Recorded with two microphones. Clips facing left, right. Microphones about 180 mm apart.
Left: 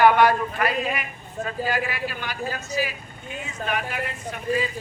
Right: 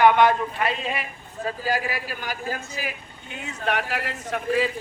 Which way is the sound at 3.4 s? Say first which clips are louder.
Right 2 dB; 75° right (ahead or behind).